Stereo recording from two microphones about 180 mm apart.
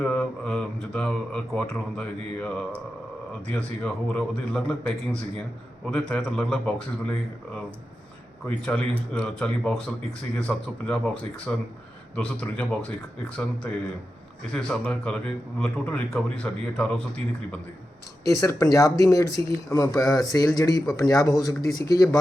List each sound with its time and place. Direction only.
0.0 s speech: 5° left (ahead or behind)
18.3 s speech: 20° left (ahead or behind)